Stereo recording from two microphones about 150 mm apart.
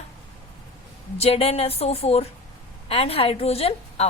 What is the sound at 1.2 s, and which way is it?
A woman's voice, 40° left (ahead or behind).